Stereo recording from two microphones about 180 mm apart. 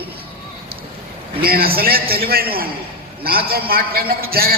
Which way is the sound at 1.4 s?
55° right (ahead or behind).